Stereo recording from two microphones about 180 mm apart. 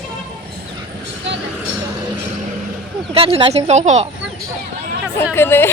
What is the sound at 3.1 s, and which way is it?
Speech, 30° right (ahead or behind).